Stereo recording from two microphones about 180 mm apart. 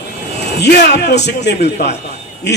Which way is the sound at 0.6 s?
65° left (ahead or behind).